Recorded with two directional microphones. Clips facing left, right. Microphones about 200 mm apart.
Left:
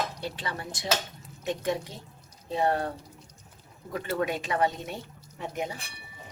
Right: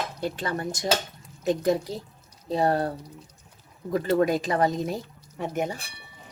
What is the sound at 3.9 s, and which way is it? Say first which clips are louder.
A woman's voice: right 7 dB; 40° right (ahead or behind).